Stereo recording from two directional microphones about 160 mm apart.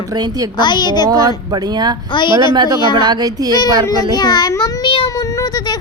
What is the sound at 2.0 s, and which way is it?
Speech, 30° left (ahead or behind).